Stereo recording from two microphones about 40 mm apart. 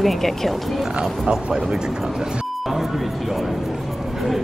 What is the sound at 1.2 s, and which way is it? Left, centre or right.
Speech, centre.